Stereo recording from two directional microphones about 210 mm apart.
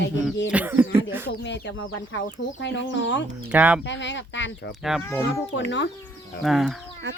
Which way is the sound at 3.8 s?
60° left (ahead or behind).